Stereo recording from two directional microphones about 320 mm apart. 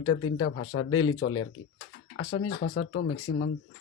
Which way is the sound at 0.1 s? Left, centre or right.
Left.